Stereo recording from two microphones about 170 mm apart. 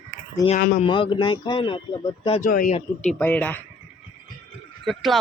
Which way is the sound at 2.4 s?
50° left (ahead or behind).